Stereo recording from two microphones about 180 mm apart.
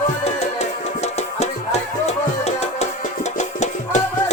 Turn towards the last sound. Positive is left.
turn(degrees=40)  # may be behind; listen again after turning